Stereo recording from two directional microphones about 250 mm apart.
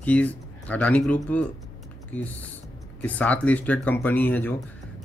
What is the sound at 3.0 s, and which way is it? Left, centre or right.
Speech, centre.